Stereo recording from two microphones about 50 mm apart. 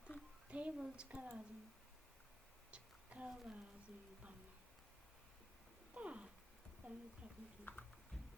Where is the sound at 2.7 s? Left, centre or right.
Right.